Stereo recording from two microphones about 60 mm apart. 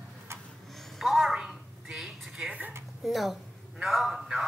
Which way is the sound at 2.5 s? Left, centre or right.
Right.